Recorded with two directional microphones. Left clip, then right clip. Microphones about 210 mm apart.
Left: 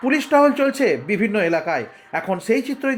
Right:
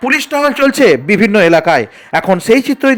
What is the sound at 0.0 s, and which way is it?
A man's voice, 45° right (ahead or behind).